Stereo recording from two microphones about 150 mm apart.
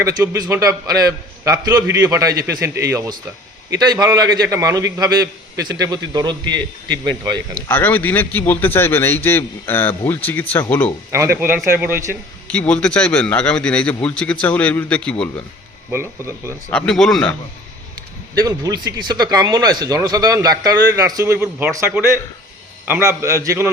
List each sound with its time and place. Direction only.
0.0 s speech: 20° right (ahead or behind)
7.7 s a man's voice: 10° left (ahead or behind)
11.3 s speech: 15° right (ahead or behind)
12.5 s a man's voice: 10° left (ahead or behind)
15.9 s speech: 15° right (ahead or behind)
16.7 s speech: 5° left (ahead or behind)
18.3 s speech: 25° right (ahead or behind)